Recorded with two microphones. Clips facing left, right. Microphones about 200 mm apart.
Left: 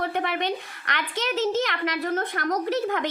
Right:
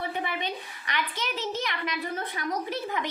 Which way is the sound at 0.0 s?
70° left (ahead or behind).